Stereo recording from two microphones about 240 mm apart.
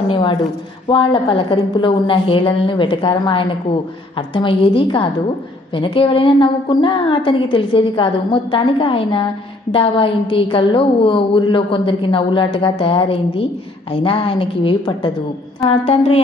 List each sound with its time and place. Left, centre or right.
0.1 s a woman's voice: centre